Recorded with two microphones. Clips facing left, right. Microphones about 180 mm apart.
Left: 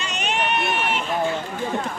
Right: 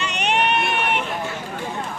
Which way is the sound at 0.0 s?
65° right (ahead or behind).